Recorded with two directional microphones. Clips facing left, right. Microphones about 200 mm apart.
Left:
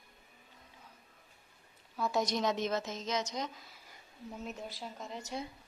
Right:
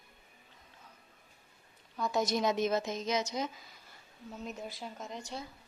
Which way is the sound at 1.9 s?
5° left (ahead or behind).